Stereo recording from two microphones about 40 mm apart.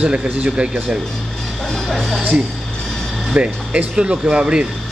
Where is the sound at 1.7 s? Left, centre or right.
Centre.